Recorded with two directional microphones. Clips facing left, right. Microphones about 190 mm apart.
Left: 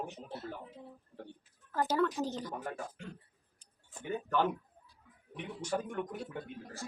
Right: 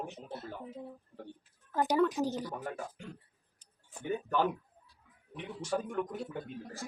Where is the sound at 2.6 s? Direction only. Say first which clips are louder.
Right 1 dB; centre (ahead or behind).